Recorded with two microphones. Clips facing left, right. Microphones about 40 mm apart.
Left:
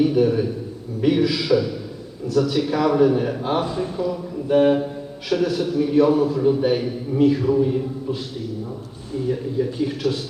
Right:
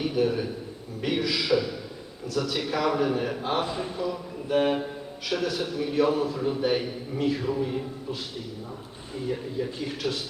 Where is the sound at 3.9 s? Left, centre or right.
Centre.